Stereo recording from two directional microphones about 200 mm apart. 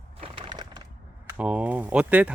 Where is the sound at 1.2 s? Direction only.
5° right (ahead or behind).